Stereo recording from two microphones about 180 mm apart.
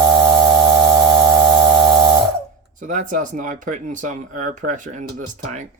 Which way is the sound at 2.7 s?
45° right (ahead or behind).